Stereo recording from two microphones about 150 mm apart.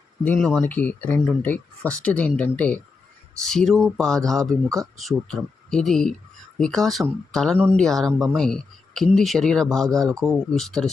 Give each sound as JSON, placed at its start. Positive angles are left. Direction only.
{"t": 0.3, "sound": "speech", "side_deg": 5}